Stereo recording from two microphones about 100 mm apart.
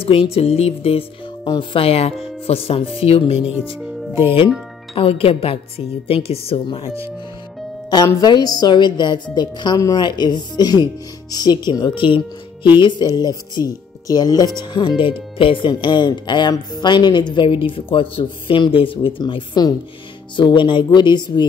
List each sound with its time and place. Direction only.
0.0 s speech: 75° left (ahead or behind)
1.4 s a woman's voice: 55° left (ahead or behind); by 3.3 s 80° left
4.1 s speech: 25° right (ahead or behind)
4.9 s a woman's voice: 65° left (ahead or behind)
8.1 s a woman's voice: 40° left (ahead or behind)